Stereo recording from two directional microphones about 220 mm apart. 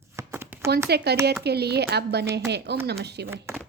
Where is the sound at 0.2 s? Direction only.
10° right (ahead or behind).